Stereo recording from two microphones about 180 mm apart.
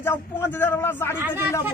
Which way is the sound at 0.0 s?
15° left (ahead or behind).